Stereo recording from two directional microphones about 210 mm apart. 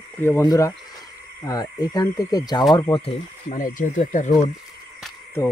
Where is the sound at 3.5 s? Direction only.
40° left (ahead or behind).